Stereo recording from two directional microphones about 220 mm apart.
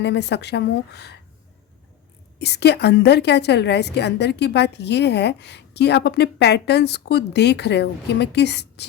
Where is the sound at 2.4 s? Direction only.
50° left (ahead or behind).